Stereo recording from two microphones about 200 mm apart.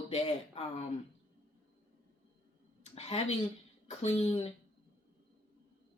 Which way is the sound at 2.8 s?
30° left (ahead or behind).